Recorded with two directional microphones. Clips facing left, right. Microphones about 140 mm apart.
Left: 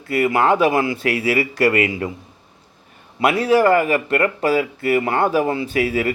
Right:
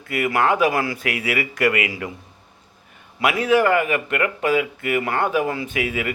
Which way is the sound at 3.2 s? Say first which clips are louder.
Left 2 dB; 35° left (ahead or behind).